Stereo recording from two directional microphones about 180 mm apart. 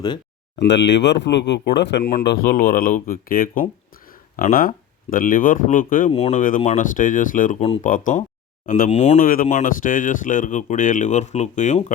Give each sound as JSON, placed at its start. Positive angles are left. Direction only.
{"t": 0.6, "sound": "speech", "side_deg": 75}
{"t": 6.1, "sound": "speech", "side_deg": 35}